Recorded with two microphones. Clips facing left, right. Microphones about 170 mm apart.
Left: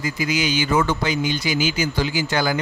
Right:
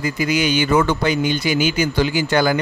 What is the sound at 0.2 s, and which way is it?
A man's voice, 60° right (ahead or behind).